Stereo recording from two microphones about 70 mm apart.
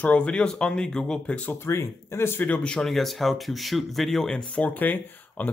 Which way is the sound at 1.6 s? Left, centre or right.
Left.